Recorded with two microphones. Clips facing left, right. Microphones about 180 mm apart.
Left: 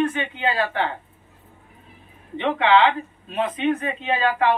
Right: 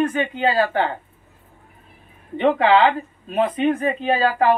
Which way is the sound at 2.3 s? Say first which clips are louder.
Right 3 dB; 40° right (ahead or behind).